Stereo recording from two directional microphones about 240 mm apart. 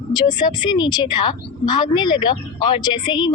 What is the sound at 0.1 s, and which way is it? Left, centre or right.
A woman's voice, centre.